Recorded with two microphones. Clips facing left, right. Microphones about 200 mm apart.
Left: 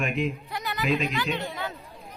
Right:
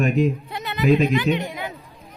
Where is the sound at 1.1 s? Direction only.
20° right (ahead or behind).